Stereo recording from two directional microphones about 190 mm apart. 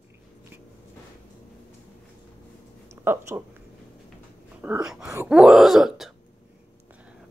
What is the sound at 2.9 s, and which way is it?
Speech, 15° right (ahead or behind).